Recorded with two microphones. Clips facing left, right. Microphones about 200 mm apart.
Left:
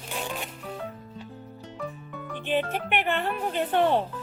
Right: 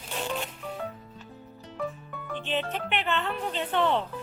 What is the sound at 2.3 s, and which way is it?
Music, 10° left (ahead or behind).